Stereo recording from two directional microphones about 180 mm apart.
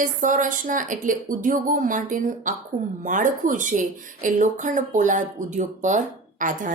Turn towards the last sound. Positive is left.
turn(degrees=-45)  # may be behind; listen again after turning